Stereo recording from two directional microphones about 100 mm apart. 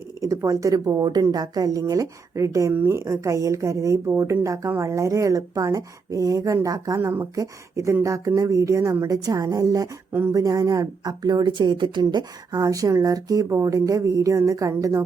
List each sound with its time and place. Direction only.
0.2 s speech: 30° right (ahead or behind)